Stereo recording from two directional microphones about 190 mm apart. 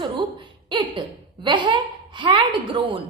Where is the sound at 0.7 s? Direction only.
25° right (ahead or behind).